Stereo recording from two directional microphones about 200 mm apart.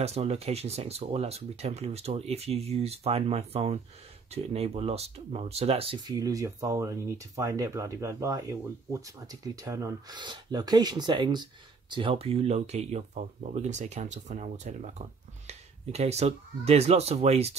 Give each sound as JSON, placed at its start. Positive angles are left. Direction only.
{"t": 0.0, "sound": "speech", "side_deg": -30}